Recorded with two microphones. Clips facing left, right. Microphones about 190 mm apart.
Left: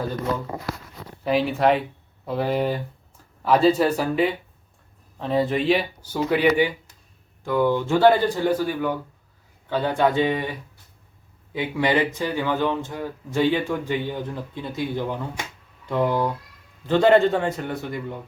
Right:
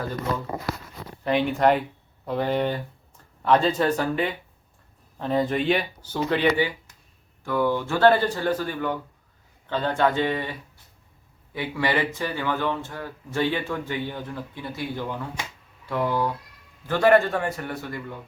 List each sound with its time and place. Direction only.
1.2 s a man's voice: 5° left (ahead or behind); by 18.2 s 20° left (ahead or behind)